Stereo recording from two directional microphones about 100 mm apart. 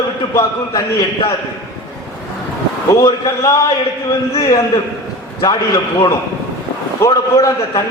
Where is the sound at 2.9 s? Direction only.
30° left (ahead or behind).